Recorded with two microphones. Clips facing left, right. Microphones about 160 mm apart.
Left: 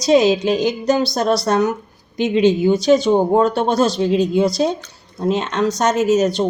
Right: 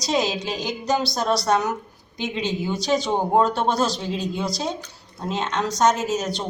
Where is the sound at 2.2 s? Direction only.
60° left (ahead or behind).